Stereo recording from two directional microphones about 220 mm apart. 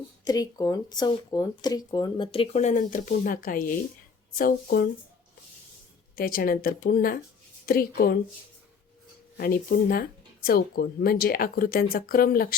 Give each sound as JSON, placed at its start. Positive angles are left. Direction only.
{"t": 0.3, "sound": "speech", "side_deg": 15}
{"t": 6.1, "sound": "speech", "side_deg": 40}
{"t": 9.4, "sound": "speech", "side_deg": 45}